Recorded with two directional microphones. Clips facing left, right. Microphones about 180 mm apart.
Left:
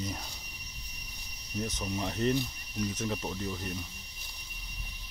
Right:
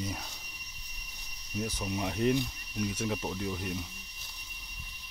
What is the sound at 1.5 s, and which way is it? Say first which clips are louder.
Speech: even; 5° right (ahead or behind).